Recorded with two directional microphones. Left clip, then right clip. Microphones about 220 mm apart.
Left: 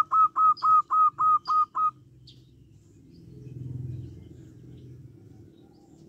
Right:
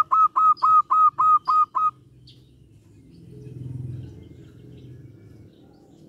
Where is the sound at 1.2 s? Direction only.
Centre (ahead or behind).